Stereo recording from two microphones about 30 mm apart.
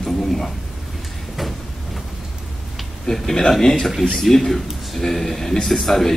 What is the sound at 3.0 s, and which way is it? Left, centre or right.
A man's voice, centre.